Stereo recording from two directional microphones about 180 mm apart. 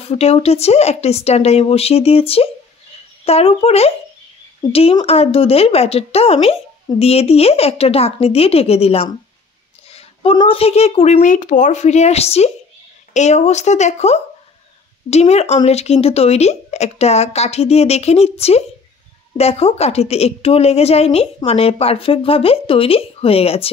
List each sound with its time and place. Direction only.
0.0 s a woman's voice: 35° left (ahead or behind)